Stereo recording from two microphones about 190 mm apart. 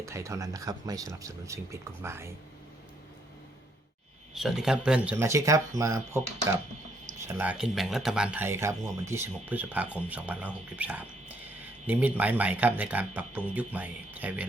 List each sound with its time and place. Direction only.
0.0 s speech: 15° right (ahead or behind)
4.4 s speech: centre (ahead or behind)
7.3 s speech: 10° right (ahead or behind)